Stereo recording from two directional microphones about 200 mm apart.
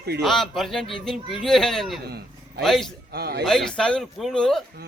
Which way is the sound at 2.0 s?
50° right (ahead or behind).